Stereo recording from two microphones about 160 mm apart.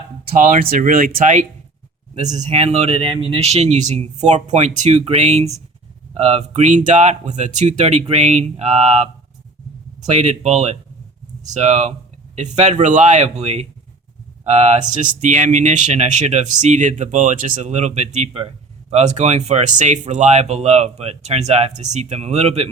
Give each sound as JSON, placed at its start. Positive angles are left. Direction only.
{"t": 0.3, "sound": "speech", "side_deg": -55}